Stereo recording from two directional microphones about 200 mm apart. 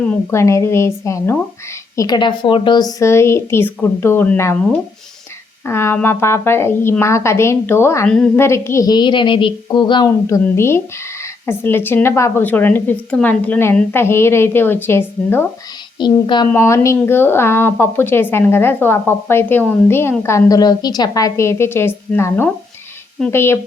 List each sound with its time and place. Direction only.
0.0 s speech: 10° left (ahead or behind)
5.6 s speech: 15° left (ahead or behind)
16.0 s speech: 20° left (ahead or behind)